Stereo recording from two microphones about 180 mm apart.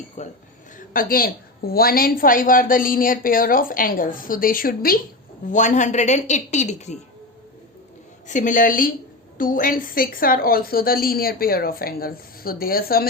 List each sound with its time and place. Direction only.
0.2 s a man's voice: 40° left (ahead or behind)
0.8 s a woman's voice: 50° left (ahead or behind)
5.5 s a woman's voice: 45° left (ahead or behind)
8.3 s a woman's voice: 45° left (ahead or behind)